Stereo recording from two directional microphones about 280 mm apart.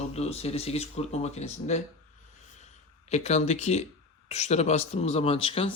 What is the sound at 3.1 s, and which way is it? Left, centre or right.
Speech, left.